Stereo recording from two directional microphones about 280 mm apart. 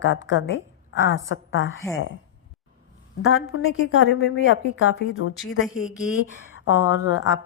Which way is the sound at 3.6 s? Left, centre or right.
Left.